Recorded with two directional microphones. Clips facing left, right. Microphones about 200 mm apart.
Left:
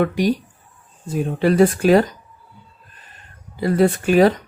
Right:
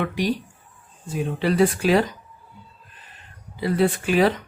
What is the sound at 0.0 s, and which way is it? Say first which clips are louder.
Speech: left 5 dB; 45° left (ahead or behind).